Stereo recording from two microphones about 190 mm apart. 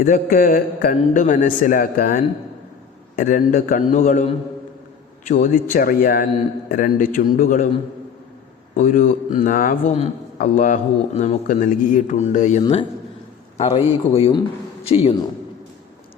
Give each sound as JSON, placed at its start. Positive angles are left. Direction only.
{"t": 0.0, "sound": "a man's voice", "side_deg": 45}
{"t": 5.3, "sound": "a man's voice", "side_deg": 45}
{"t": 8.7, "sound": "a man's voice", "side_deg": 40}
{"t": 12.6, "sound": "a man's voice", "side_deg": 25}